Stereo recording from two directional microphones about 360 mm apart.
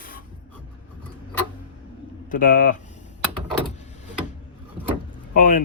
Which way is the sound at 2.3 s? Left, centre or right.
Left.